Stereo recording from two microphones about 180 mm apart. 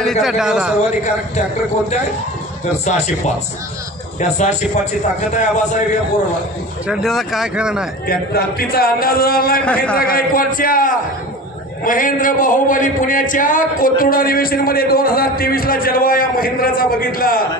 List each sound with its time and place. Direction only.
0.0 s a man's voice: centre (ahead or behind)
2.8 s speech: 40° left (ahead or behind)
4.2 s a man's voice: 40° left (ahead or behind)
6.9 s speech: centre (ahead or behind)
8.1 s a man's voice: 55° left (ahead or behind)